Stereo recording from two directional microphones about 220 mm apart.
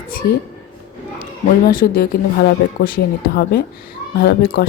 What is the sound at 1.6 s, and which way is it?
Speech, 40° left (ahead or behind).